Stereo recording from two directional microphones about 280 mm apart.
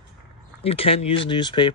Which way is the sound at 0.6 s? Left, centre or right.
Left.